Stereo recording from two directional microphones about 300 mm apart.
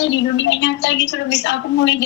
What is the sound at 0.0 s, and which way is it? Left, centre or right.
A woman's voice, left.